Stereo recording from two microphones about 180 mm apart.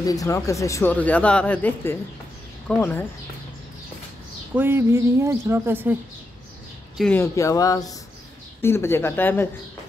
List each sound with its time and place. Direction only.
0.0 s speech: 20° left (ahead or behind)
4.6 s a woman's voice: 15° right (ahead or behind)
7.0 s speech: 10° left (ahead or behind)